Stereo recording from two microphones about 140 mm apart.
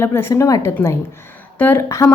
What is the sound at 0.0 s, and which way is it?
A woman's voice, 20° left (ahead or behind).